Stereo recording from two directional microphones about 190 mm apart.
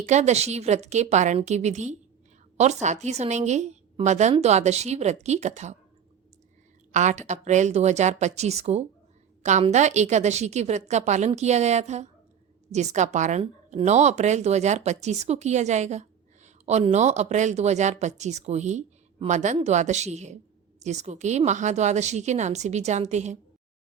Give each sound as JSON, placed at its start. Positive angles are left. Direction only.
{"t": 0.0, "sound": "speech", "side_deg": -35}
{"t": 6.9, "sound": "speech", "side_deg": -40}